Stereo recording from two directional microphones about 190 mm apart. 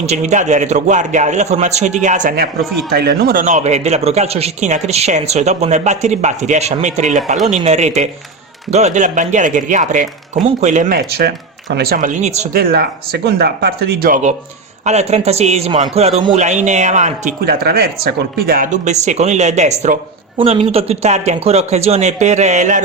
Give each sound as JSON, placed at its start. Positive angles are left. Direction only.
{"t": 0.0, "sound": "speech", "side_deg": -35}
{"t": 3.4, "sound": "speech", "side_deg": -40}
{"t": 10.9, "sound": "speech", "side_deg": -55}
{"t": 12.5, "sound": "speech", "side_deg": -55}
{"t": 17.4, "sound": "speech", "side_deg": -55}